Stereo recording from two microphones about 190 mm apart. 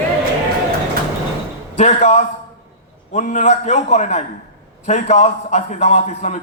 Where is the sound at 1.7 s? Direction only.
40° left (ahead or behind).